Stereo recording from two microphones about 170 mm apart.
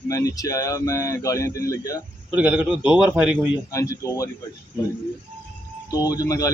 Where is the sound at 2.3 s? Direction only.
10° right (ahead or behind).